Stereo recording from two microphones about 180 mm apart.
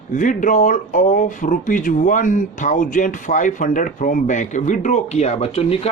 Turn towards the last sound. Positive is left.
turn(degrees=35)  # may be behind; listen again after turning